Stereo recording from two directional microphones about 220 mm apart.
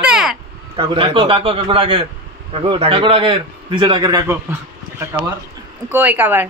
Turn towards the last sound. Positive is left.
turn(degrees=-10)  # may be behind; listen again after turning